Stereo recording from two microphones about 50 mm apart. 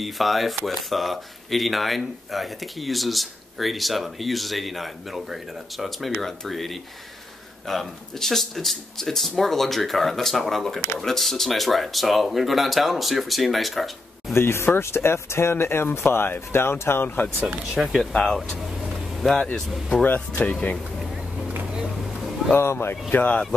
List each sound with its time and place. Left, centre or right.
0.0 s speech: centre
14.3 s speech: left
17.6 s speech: centre
18.1 s speech: centre
20.0 s speech: left
22.6 s speech: left
23.0 s speech: left